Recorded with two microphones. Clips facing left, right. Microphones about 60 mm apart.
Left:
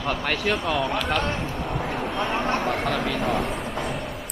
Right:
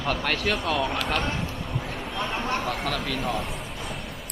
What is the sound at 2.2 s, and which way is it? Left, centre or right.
Speech, left.